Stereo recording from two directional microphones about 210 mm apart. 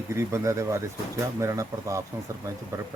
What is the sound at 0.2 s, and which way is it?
Speech, 15° right (ahead or behind).